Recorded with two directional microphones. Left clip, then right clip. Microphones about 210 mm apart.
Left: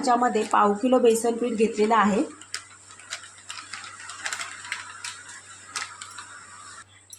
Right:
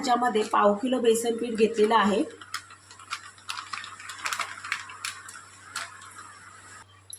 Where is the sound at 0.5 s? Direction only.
15° left (ahead or behind).